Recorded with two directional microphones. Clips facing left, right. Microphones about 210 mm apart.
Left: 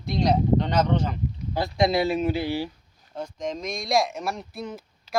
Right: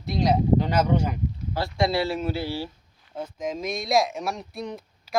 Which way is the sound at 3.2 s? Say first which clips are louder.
Right 1 dB; 5° right (ahead or behind).